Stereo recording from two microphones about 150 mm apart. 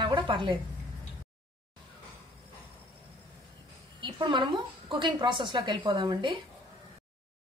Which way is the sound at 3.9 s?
35° right (ahead or behind).